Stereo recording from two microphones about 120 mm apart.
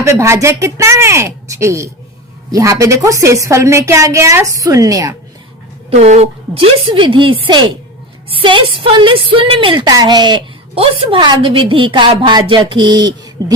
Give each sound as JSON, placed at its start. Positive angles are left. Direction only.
{"t": 0.0, "sound": "a woman's voice", "side_deg": -25}
{"t": 6.0, "sound": "a woman's voice", "side_deg": -60}
{"t": 6.8, "sound": "a woman's voice", "side_deg": -45}